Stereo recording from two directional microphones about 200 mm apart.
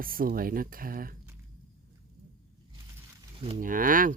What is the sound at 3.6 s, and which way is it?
Speech, 40° right (ahead or behind).